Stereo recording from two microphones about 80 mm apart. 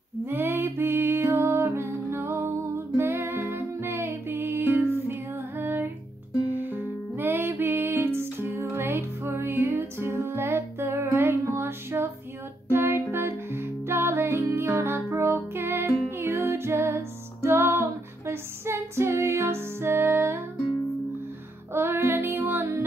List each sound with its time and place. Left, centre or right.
0.3 s music: right
7.2 s music: right
21.7 s music: right